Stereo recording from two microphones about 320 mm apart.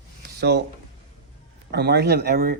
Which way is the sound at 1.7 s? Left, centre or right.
Right.